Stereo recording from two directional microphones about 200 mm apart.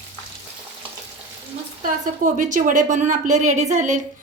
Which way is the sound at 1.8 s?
40° right (ahead or behind).